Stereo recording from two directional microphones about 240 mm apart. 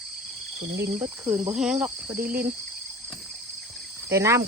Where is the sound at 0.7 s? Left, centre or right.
Right.